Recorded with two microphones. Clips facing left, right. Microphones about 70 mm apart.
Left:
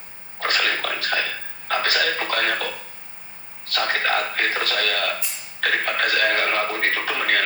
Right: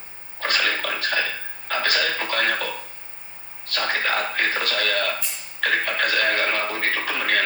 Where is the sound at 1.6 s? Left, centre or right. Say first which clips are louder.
Left 2 dB; left.